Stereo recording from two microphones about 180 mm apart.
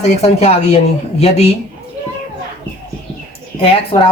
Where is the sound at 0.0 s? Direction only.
35° left (ahead or behind).